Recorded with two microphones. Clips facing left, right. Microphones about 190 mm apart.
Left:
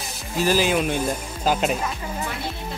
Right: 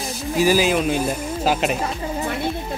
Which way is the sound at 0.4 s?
10° right (ahead or behind).